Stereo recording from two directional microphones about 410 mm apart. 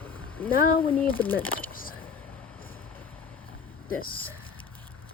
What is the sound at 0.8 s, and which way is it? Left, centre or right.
Speech, centre.